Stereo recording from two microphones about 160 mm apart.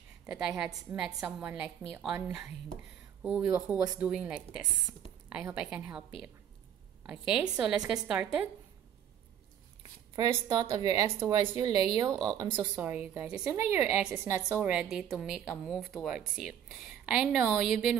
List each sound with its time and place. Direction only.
0.3 s a woman's voice: 5° right (ahead or behind)
3.3 s a woman's voice: 10° right (ahead or behind)
7.1 s a woman's voice: 5° right (ahead or behind)
10.1 s a woman's voice: 25° right (ahead or behind)
12.5 s a woman's voice: 10° right (ahead or behind)